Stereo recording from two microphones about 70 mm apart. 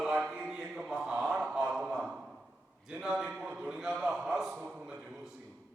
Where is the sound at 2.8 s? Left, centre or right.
Centre.